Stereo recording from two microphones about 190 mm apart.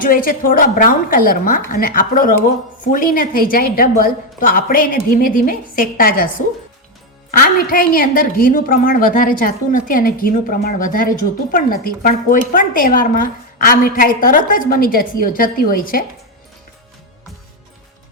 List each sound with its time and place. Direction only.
0.0 s a woman's voice: 50° left (ahead or behind)
7.3 s a woman's voice: 45° left (ahead or behind)